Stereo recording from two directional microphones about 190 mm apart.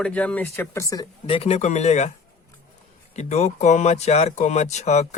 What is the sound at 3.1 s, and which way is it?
Speech, 35° left (ahead or behind).